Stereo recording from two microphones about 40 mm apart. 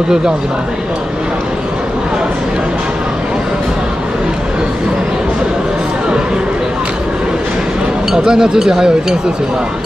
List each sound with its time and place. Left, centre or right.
8.3 s speech: centre